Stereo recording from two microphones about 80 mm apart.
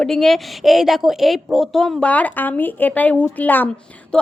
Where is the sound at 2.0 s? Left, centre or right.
Centre.